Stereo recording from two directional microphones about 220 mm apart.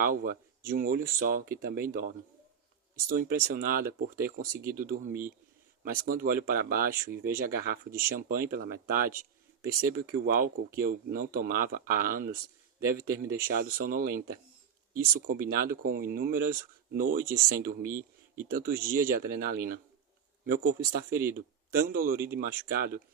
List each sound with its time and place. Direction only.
0.0 s speech: 40° right (ahead or behind)
10.1 s speech: 40° right (ahead or behind)
21.1 s speech: 10° right (ahead or behind)
21.3 s a man's voice: 40° right (ahead or behind)